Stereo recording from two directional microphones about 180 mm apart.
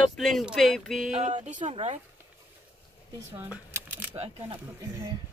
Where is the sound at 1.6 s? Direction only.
40° right (ahead or behind).